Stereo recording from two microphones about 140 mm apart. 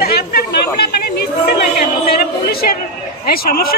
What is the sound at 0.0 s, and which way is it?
Chatter, 90° left.